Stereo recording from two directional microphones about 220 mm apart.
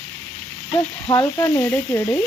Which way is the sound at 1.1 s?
10° left (ahead or behind).